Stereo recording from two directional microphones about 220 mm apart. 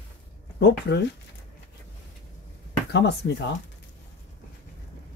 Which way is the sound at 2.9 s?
50° left (ahead or behind).